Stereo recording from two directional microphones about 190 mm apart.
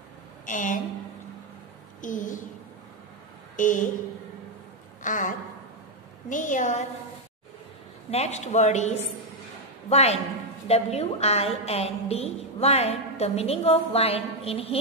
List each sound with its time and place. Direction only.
0.5 s a woman's voice: 45° left (ahead or behind)
2.0 s a woman's voice: 45° left (ahead or behind)
3.5 s a woman's voice: 45° left (ahead or behind)
5.0 s a sound: 45° left (ahead or behind)
6.2 s a woman's voice: 45° left (ahead or behind)
8.1 s a woman's voice: 35° left (ahead or behind)